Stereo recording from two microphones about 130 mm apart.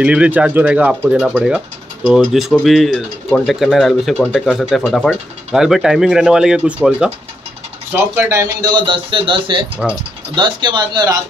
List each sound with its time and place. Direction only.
0.0 s speech: 10° right (ahead or behind)
7.9 s speech: 15° right (ahead or behind)
8.7 s speech: 40° right (ahead or behind)